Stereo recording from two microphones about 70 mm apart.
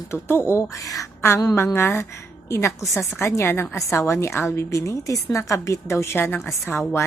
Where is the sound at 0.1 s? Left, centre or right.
Left.